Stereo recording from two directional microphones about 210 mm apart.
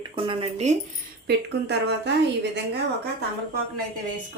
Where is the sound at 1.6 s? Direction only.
55° right (ahead or behind).